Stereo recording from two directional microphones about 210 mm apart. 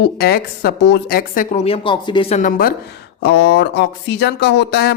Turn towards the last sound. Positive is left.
turn(degrees=50)  # may be behind; listen again after turning